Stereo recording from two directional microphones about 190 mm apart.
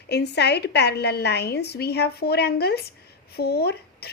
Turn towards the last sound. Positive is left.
turn(degrees=55)  # may be behind; listen again after turning